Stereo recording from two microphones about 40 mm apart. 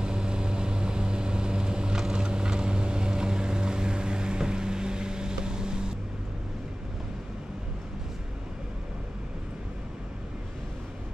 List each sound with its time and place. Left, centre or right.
0.0 s vehicle: centre
2.1 s boat: right